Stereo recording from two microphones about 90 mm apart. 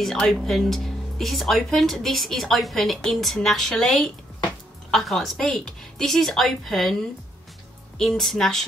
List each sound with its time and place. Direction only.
0.0 s speech: 5° left (ahead or behind)
8.0 s speech: centre (ahead or behind)